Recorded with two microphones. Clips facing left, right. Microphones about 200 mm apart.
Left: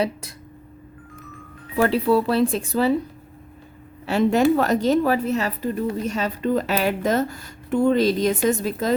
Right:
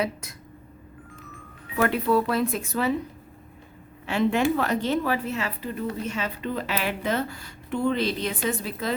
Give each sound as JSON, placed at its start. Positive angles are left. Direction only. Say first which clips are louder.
{"t": 0.0, "sound": "a woman's voice", "louder": "left 4 dB", "side_deg": 30}
{"t": 1.7, "sound": "a woman's voice", "louder": "left 4 dB", "side_deg": 30}
{"t": 4.0, "sound": "a woman's voice", "louder": "left 5 dB", "side_deg": 40}